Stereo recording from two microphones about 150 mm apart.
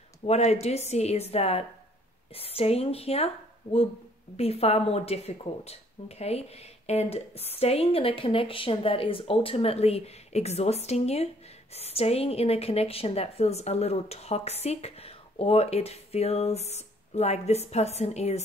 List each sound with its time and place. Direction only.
0.3 s a woman's voice: 45° left (ahead or behind)
4.4 s speech: 45° left (ahead or behind)